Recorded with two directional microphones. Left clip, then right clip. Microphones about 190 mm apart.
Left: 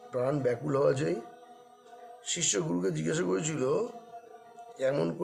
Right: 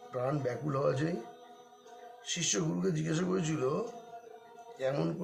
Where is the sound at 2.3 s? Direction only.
60° left (ahead or behind).